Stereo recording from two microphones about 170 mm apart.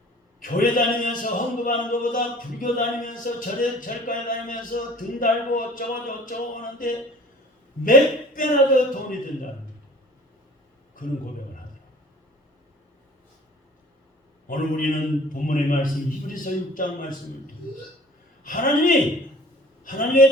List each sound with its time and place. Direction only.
0.3 s a man's voice: 55° left (ahead or behind)
14.4 s a man's voice: 50° left (ahead or behind)
18.4 s a man's voice: 55° left (ahead or behind)